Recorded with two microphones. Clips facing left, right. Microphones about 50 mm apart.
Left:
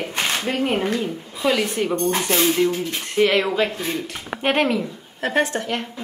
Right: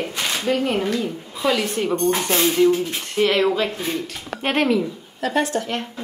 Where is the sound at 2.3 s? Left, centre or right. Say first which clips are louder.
Right 3 dB; centre.